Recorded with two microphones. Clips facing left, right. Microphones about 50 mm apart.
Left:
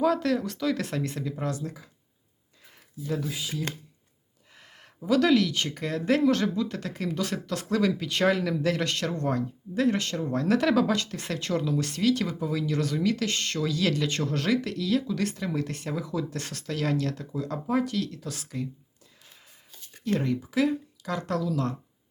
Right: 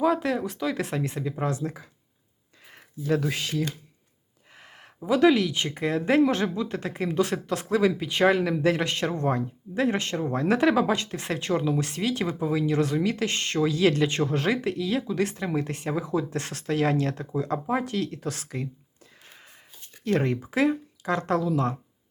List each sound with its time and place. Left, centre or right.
0.0 s speech: centre; by 1.8 s right
2.7 s speech: right
4.5 s speech: right
19.2 s a sound: right
20.1 s speech: right